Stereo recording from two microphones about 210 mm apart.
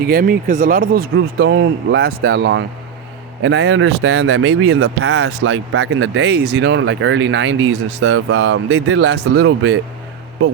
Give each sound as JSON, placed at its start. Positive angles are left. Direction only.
{"t": 0.0, "sound": "speech", "side_deg": -45}